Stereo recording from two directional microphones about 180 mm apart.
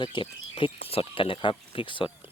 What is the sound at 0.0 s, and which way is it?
Speech, 25° left (ahead or behind).